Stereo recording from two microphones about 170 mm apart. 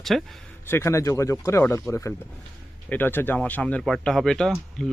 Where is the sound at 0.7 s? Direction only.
15° left (ahead or behind).